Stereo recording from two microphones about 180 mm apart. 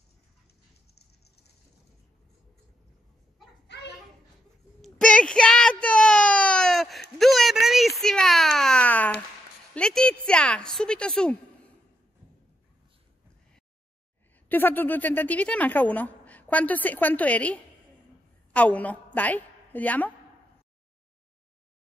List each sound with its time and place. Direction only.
3.6 s children playing: 70° left (ahead or behind)
4.8 s a sound: 5° left (ahead or behind)
9.8 s a woman's voice: 5° left (ahead or behind)
14.5 s a woman's voice: 10° left (ahead or behind)